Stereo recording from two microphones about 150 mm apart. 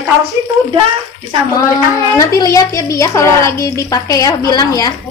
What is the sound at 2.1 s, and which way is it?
A woman's voice, 20° left (ahead or behind).